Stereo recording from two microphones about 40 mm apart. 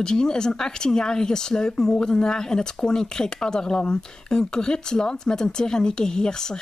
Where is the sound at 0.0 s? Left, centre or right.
Centre.